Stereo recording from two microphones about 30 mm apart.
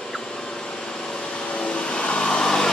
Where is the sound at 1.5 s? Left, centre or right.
Left.